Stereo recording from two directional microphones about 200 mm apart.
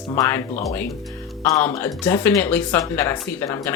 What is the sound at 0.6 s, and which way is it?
Speech, 15° left (ahead or behind).